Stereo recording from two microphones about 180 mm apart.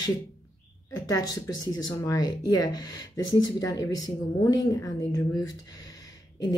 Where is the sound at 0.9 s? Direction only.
20° left (ahead or behind).